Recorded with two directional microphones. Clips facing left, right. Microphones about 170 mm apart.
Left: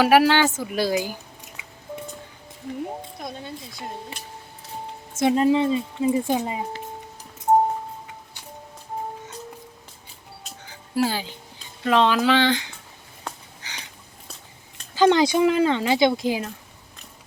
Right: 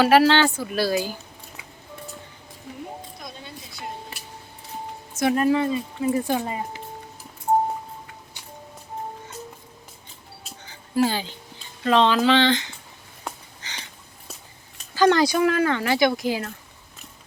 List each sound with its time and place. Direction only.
0.0 s speech: 10° left (ahead or behind)
5.2 s speech: 20° left (ahead or behind)
10.9 s speech: 5° left (ahead or behind)
13.6 s a sound: 5° left (ahead or behind)
14.9 s speech: 20° left (ahead or behind)